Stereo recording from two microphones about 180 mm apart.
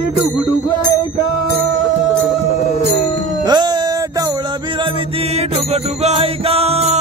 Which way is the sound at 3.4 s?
25° right (ahead or behind).